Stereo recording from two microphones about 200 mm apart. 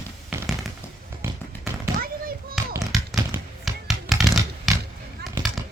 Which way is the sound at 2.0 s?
45° right (ahead or behind).